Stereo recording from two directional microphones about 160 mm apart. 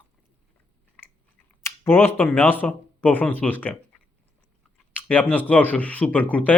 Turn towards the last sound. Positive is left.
turn(degrees=10)  # may be behind; listen again after turning